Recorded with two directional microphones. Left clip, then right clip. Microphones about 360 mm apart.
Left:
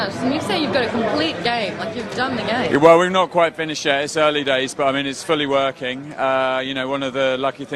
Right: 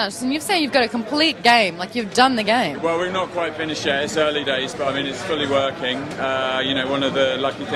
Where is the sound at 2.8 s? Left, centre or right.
Left.